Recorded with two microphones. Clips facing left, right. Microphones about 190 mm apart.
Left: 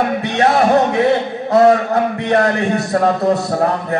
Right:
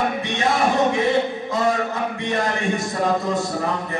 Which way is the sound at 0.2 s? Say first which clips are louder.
Left 6 dB; 65° left (ahead or behind).